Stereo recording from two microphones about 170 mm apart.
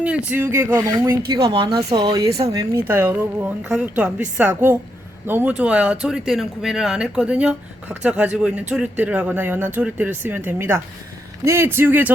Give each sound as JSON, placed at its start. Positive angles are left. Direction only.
{"t": 0.3, "sound": "speech", "side_deg": -10}